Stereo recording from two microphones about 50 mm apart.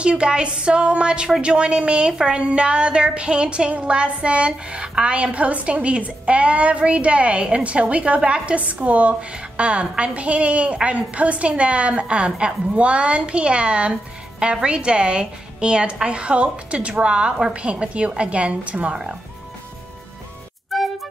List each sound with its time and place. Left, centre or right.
0.0 s a woman's voice: centre
20.7 s music: centre